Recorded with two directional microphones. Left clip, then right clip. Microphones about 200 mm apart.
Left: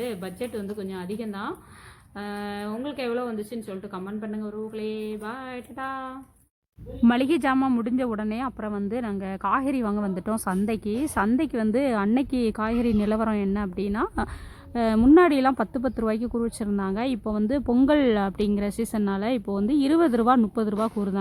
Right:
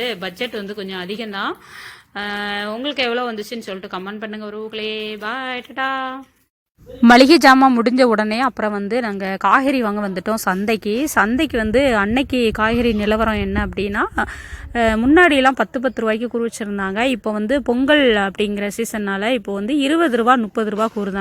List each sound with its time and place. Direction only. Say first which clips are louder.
0.0 s a woman's voice: right 8 dB; 30° right (ahead or behind); by 20.7 s 5° right (ahead or behind)